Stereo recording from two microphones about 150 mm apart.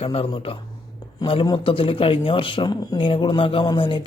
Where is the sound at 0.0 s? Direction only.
40° left (ahead or behind).